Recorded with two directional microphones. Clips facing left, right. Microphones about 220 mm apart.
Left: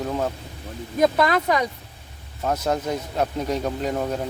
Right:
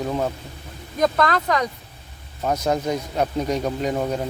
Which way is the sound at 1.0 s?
10° left (ahead or behind).